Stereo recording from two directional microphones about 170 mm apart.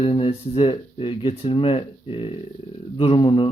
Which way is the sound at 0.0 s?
35° left (ahead or behind).